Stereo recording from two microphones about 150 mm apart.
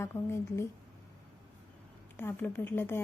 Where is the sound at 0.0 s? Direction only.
15° left (ahead or behind).